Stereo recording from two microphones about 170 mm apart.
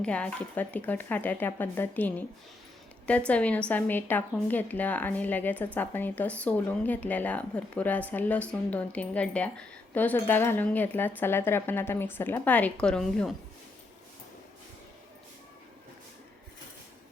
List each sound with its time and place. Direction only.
0.0 s a woman's voice: 5° left (ahead or behind)